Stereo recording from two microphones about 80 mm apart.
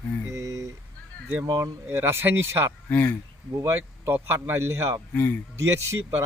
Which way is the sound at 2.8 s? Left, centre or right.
Left.